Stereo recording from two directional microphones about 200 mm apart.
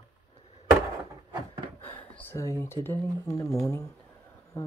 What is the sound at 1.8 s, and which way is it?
Speech, 10° left (ahead or behind).